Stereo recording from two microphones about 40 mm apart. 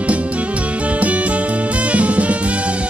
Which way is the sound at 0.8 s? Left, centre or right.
Right.